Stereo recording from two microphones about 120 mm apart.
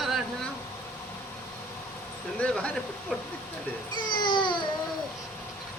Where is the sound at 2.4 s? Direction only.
10° left (ahead or behind).